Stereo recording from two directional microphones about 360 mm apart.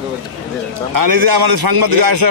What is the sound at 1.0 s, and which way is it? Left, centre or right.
A man's voice, right.